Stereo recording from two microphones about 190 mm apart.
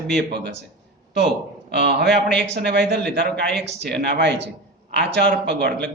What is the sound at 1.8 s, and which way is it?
Speech, 60° right (ahead or behind).